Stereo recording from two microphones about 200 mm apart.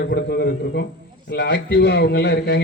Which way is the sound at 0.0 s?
55° left (ahead or behind).